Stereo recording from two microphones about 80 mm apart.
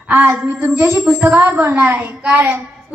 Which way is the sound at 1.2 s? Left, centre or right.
Right.